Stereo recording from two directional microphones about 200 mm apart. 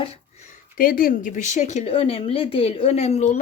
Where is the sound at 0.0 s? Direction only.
30° left (ahead or behind).